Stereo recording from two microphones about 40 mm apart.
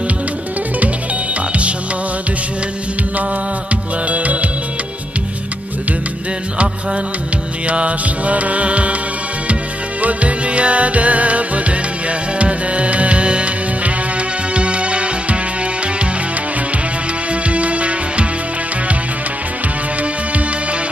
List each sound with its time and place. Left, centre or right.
4.1 s music: right
7.6 s music: right
10.0 s music: right
17.3 s music: right